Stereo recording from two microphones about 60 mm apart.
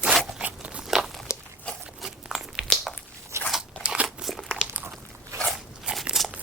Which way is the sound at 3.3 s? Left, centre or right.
Right.